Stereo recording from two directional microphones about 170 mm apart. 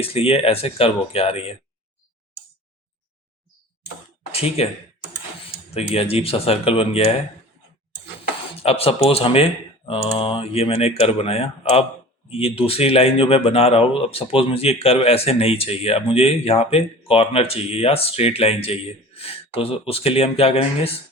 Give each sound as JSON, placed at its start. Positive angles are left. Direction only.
{"t": 0.0, "sound": "speech", "side_deg": 35}
{"t": 4.3, "sound": "speech", "side_deg": 35}
{"t": 5.7, "sound": "speech", "side_deg": 35}
{"t": 8.5, "sound": "speech", "side_deg": 35}